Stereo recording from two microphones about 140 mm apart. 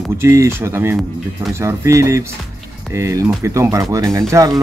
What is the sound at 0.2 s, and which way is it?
Speech, 20° right (ahead or behind).